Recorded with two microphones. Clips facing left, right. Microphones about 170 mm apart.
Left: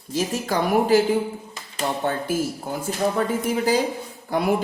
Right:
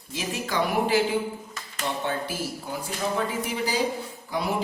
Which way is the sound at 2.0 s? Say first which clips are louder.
Left 6 dB; 50° left (ahead or behind).